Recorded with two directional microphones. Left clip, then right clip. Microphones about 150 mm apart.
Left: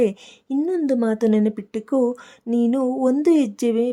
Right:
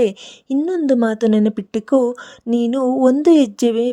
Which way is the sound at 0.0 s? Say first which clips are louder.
Right 3 dB; 35° right (ahead or behind).